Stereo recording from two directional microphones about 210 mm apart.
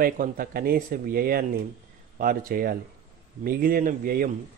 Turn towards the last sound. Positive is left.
turn(degrees=-45)  # may be behind; listen again after turning